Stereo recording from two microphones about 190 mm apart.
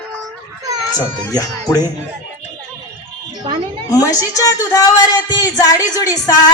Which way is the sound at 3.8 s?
15° left (ahead or behind).